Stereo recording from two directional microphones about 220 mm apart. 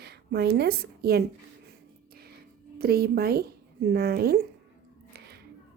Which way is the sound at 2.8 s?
45° right (ahead or behind).